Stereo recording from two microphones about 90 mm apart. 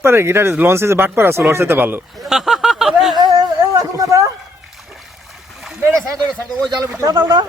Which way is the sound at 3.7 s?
40° right (ahead or behind).